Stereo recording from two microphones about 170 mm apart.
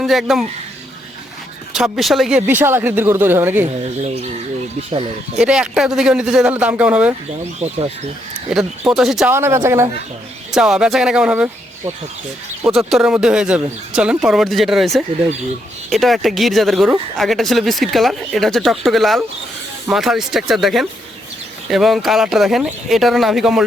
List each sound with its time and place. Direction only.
0.0 s speech: centre (ahead or behind)
1.7 s speech: centre (ahead or behind)
4.0 s speech: 40° right (ahead or behind)
5.4 s a man's voice: 5° right (ahead or behind)
7.6 s speech: 35° right (ahead or behind)
8.4 s a man's voice: 5° right (ahead or behind)
9.3 s speech: 15° right (ahead or behind)
10.5 s a man's voice: 5° right (ahead or behind)
12.9 s a man's voice: 5° right (ahead or behind)